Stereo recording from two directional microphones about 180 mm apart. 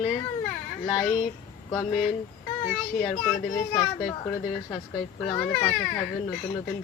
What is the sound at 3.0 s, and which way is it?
Speech, centre (ahead or behind).